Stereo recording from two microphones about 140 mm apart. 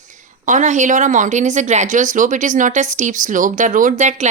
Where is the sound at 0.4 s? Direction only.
65° right (ahead or behind).